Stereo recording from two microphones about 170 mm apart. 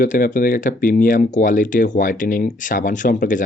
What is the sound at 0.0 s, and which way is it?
Speech, 55° left (ahead or behind).